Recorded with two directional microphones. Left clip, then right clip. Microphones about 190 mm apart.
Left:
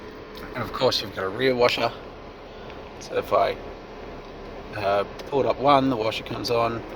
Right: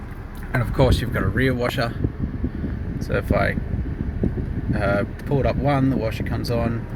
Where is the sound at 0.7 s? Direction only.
5° left (ahead or behind).